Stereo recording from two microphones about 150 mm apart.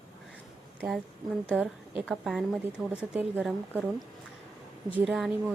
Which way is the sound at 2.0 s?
Centre (ahead or behind).